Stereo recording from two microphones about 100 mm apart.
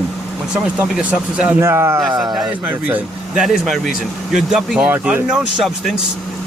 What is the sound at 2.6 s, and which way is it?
Speech, 15° right (ahead or behind).